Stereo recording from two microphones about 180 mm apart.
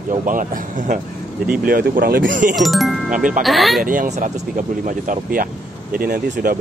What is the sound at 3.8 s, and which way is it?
Speech, 45° right (ahead or behind).